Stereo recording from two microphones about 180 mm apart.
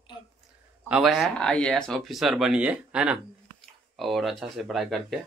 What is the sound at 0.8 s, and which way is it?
Speech, 5° right (ahead or behind).